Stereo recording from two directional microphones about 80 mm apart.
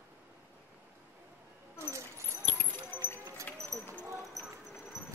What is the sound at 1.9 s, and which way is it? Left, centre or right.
Keys jangling, right.